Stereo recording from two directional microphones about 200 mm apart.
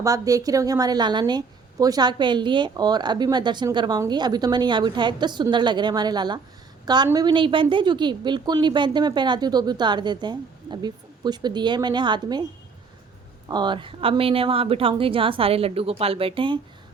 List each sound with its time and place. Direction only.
0.0 s a woman's voice: 15° right (ahead or behind)
13.5 s a woman's voice: 20° right (ahead or behind)